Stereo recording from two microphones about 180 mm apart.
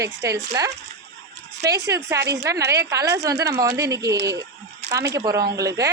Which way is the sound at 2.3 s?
20° right (ahead or behind).